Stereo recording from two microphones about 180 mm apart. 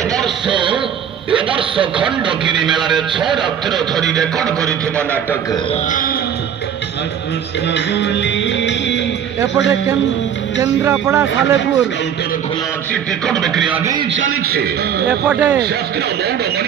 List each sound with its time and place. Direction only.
0.5 s a sound: 25° right (ahead or behind)
1.3 s a man's voice: 30° right (ahead or behind)
3.2 s a man's voice: centre (ahead or behind)
5.9 s music: 50° left (ahead or behind)
7.7 s music: 75° left (ahead or behind)
10.6 s speech: 15° right (ahead or behind)
13.3 s a man's voice: centre (ahead or behind)
14.1 s a man's voice: 75° right (ahead or behind)
15.0 s speech: 5° right (ahead or behind)